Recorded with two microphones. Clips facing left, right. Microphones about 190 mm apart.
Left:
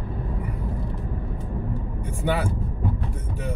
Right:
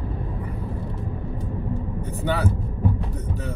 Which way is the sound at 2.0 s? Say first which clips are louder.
Even; 15° left (ahead or behind).